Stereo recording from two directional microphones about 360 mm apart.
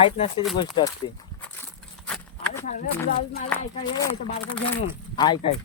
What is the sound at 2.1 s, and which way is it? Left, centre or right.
Clip-clop, centre.